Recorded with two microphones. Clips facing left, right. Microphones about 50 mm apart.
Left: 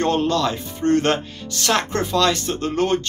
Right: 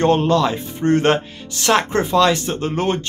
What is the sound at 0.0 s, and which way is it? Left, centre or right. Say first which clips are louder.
Speech: right 4 dB; centre.